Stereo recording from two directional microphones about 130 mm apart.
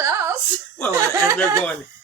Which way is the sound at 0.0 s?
20° right (ahead or behind).